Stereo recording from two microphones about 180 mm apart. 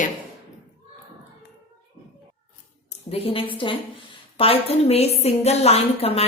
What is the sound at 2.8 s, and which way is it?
A woman's voice, 30° left (ahead or behind).